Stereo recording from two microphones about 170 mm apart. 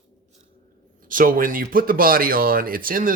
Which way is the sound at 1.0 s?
55° right (ahead or behind).